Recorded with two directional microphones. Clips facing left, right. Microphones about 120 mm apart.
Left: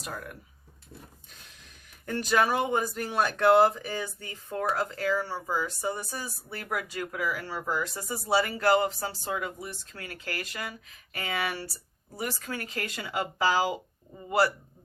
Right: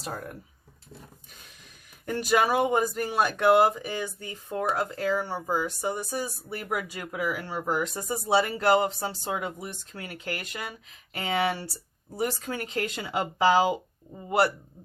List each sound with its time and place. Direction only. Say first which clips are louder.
0.0 s speech: right 3 dB; 30° right (ahead or behind)
2.0 s speech: right 2 dB; 10° right (ahead or behind)